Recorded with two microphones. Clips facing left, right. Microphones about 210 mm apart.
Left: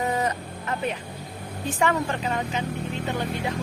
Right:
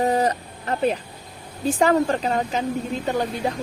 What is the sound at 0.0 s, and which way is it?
A woman's voice, 35° right (ahead or behind).